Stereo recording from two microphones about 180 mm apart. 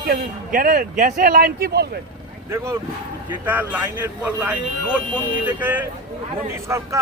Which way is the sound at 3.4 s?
10° right (ahead or behind).